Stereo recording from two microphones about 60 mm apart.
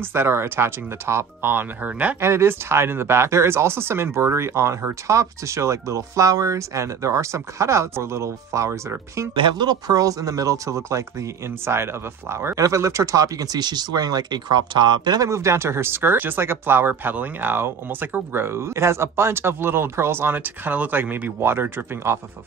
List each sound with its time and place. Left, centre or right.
0.1 s speech: right
2.1 s speech: right
9.8 s speech: right
11.6 s speech: right
12.5 s speech: right
15.1 s speech: right